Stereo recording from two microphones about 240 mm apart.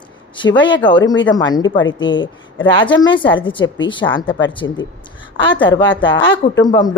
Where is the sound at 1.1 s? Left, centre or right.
Left.